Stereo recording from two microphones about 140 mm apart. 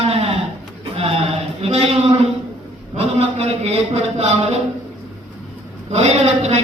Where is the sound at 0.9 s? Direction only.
45° right (ahead or behind).